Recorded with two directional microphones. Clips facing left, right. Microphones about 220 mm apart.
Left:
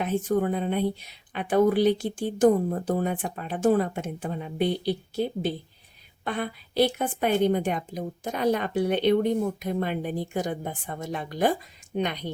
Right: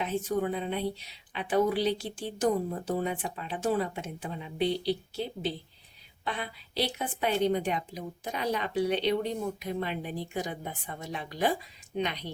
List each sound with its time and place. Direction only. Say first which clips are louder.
0.0 s a woman's voice: left 5 dB; 50° left (ahead or behind)